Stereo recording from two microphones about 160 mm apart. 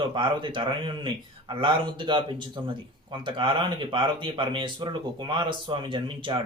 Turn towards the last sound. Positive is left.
turn(degrees=-30)  # may be behind; listen again after turning